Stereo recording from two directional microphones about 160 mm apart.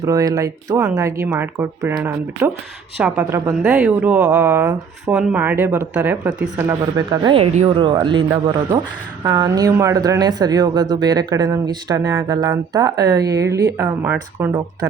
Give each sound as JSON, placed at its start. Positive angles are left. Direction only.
{"t": 0.0, "sound": "speech", "side_deg": -20}
{"t": 7.3, "sound": "speech", "side_deg": -40}
{"t": 9.2, "sound": "speech", "side_deg": -20}